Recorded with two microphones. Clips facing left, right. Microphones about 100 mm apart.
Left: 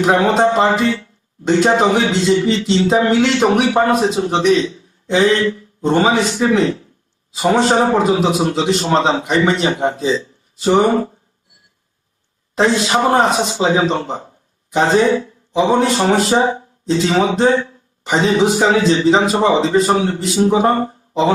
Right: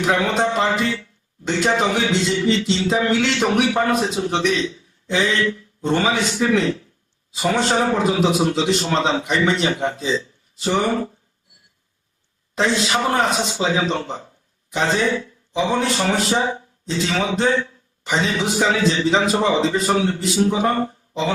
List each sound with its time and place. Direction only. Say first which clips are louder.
0.0 s a man's voice: left 6 dB; 35° left (ahead or behind)
12.5 s a man's voice: left 5 dB; 35° left (ahead or behind)